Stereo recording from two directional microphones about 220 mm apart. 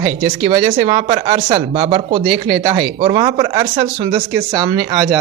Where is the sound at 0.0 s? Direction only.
20° right (ahead or behind).